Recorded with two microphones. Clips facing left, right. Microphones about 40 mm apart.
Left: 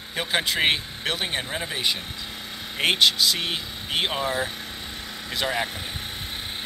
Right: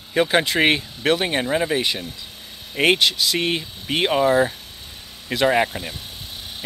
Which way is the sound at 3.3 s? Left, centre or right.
Right.